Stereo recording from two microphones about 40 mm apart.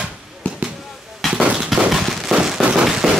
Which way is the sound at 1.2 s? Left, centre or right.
Centre.